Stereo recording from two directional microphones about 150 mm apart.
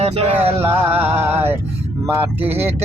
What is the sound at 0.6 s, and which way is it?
Speech, 15° right (ahead or behind).